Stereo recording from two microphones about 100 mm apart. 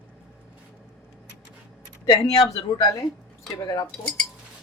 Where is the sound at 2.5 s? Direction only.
35° left (ahead or behind).